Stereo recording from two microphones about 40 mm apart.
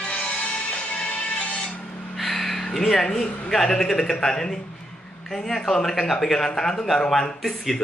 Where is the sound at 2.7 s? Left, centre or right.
Centre.